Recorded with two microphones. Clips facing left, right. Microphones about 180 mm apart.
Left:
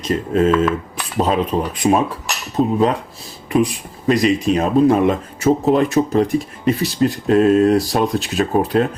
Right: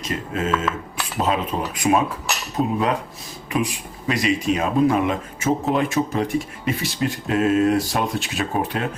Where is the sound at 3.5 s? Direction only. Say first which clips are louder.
Left 7 dB; 35° left (ahead or behind).